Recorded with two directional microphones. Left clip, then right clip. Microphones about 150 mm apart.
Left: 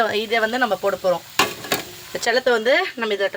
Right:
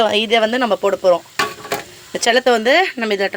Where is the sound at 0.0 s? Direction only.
30° right (ahead or behind).